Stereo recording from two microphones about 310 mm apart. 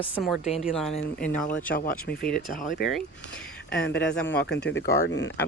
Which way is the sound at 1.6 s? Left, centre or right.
Left.